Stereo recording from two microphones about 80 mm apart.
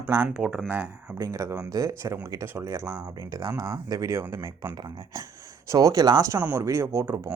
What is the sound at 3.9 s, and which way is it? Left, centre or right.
Speech, right.